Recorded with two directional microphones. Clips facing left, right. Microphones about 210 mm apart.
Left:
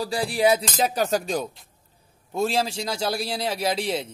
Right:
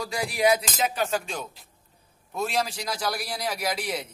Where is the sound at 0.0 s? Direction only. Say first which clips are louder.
Left 3 dB; 30° left (ahead or behind).